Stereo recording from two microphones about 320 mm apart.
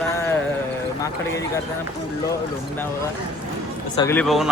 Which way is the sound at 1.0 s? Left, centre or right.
Centre.